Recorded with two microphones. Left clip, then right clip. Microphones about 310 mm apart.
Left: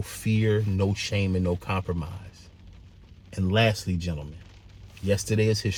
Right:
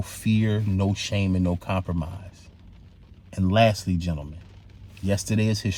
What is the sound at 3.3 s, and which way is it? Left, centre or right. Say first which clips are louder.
Speech: right 4 dB; centre.